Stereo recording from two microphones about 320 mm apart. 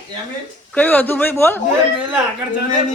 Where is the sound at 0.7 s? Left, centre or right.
Centre.